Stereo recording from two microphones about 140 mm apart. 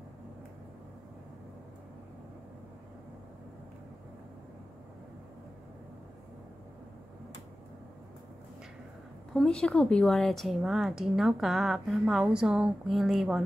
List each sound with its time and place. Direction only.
9.3 s a woman's voice: 5° left (ahead or behind)